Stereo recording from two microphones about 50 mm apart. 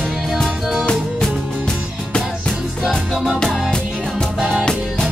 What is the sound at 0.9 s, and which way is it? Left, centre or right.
Music, centre.